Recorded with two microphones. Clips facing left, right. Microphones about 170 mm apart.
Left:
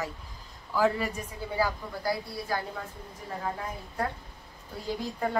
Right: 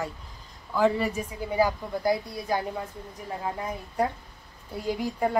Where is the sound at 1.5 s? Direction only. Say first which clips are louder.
Right 5 dB; 20° right (ahead or behind).